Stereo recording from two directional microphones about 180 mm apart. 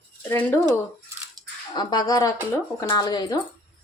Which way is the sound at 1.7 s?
25° left (ahead or behind).